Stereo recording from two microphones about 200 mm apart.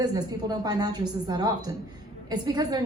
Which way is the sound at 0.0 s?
20° right (ahead or behind).